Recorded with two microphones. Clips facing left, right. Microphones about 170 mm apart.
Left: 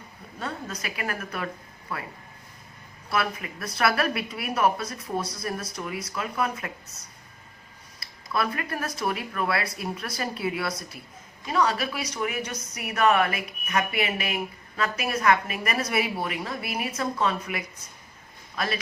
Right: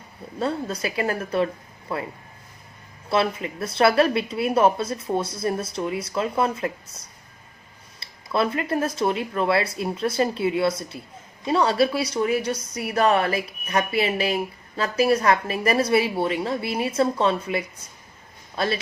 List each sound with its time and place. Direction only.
0.3 s a woman's voice: 30° right (ahead or behind)
3.1 s a woman's voice: 25° right (ahead or behind)